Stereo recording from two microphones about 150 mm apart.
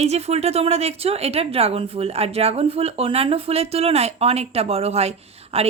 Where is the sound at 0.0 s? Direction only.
45° right (ahead or behind).